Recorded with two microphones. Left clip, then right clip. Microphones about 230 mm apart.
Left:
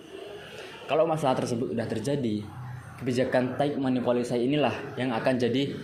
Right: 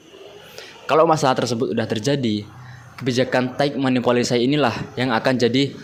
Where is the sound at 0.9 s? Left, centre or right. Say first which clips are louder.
Right 9 dB; right.